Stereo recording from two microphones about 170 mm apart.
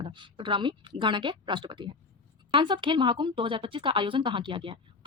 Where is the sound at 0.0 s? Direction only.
30° right (ahead or behind).